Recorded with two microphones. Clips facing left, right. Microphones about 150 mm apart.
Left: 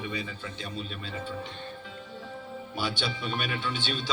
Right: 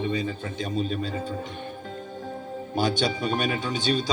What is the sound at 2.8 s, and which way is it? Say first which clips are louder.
Speech: right 8 dB; 45° right (ahead or behind).